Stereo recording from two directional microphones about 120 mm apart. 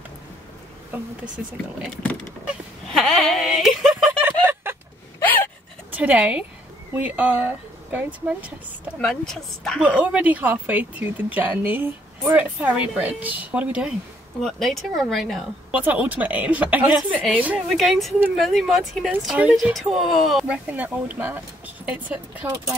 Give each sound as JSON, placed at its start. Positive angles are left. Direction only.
{"t": 0.9, "sound": "speech", "side_deg": -10}
{"t": 2.9, "sound": "a sound", "side_deg": 5}
{"t": 4.2, "sound": "a sound", "side_deg": -15}
{"t": 5.2, "sound": "gasp", "side_deg": 15}
{"t": 5.9, "sound": "speech", "side_deg": -15}
{"t": 9.0, "sound": "speech", "side_deg": 5}
{"t": 9.8, "sound": "speech", "side_deg": -10}
{"t": 14.4, "sound": "speech", "side_deg": 5}
{"t": 15.7, "sound": "speech", "side_deg": -10}
{"t": 17.6, "sound": "speech", "side_deg": 0}
{"t": 19.5, "sound": "speech", "side_deg": 0}
{"t": 20.4, "sound": "speech", "side_deg": -10}